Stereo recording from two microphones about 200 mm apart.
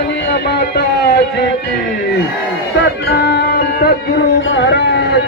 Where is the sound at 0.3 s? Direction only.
55° left (ahead or behind).